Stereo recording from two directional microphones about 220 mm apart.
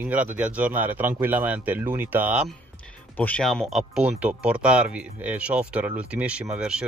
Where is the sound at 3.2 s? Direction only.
5° left (ahead or behind).